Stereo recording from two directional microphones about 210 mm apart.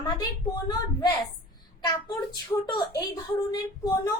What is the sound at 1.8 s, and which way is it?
A child's voice, 20° left (ahead or behind).